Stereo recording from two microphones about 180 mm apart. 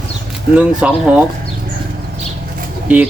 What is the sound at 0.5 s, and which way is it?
Speech, 5° right (ahead or behind).